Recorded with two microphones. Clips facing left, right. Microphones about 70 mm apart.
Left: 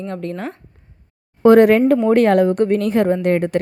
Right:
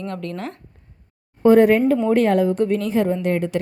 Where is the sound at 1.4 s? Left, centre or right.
Left.